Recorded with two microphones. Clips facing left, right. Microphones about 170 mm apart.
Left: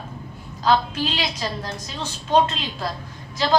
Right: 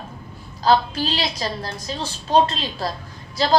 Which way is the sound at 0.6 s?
35° right (ahead or behind).